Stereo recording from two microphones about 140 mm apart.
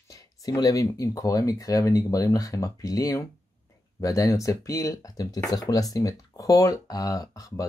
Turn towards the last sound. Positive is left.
turn(degrees=25)  # may be behind; listen again after turning